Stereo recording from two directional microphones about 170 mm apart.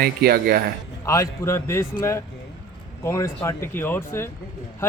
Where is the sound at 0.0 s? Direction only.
65° right (ahead or behind).